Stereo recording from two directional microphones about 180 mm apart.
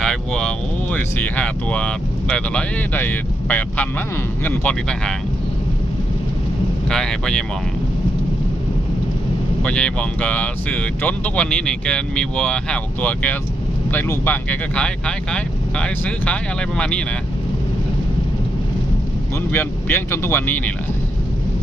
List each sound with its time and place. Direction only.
0.0 s speech: 5° left (ahead or behind)
6.9 s speech: 5° left (ahead or behind)
9.6 s speech: 5° left (ahead or behind)
19.5 s speech: 10° left (ahead or behind)